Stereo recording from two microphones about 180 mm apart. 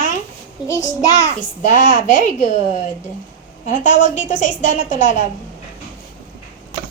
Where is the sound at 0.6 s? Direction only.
20° left (ahead or behind).